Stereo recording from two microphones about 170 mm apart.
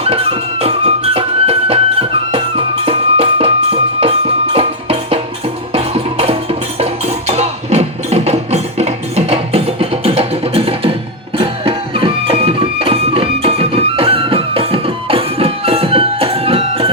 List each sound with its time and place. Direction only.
0.0 s music: 35° right (ahead or behind)